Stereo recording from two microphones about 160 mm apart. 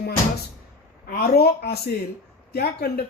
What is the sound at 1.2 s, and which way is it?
Speech, 80° left.